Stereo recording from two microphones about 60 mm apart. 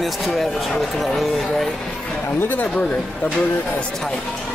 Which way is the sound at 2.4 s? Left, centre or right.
Left.